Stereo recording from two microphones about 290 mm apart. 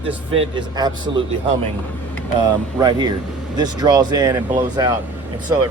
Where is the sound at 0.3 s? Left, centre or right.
Centre.